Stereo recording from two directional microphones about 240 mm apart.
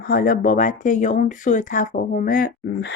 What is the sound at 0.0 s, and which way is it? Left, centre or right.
Speech, left.